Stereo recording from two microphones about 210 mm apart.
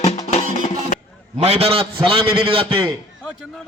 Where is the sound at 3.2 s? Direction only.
5° left (ahead or behind).